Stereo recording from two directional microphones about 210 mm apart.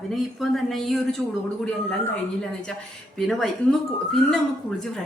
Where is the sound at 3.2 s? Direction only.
Centre (ahead or behind).